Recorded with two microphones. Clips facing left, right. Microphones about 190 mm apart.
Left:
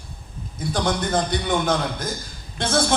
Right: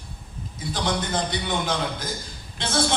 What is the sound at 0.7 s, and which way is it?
Speech, 50° left (ahead or behind).